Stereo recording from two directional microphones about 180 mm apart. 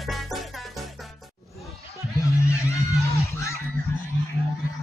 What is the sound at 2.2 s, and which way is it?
Music, 15° left (ahead or behind).